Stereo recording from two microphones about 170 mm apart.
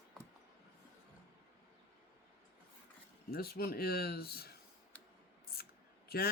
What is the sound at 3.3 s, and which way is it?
Speech, 60° left (ahead or behind).